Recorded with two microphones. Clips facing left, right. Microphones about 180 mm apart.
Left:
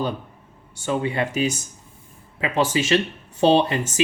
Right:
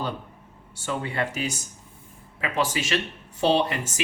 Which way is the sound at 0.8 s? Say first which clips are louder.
Left 5 dB; 15° left (ahead or behind).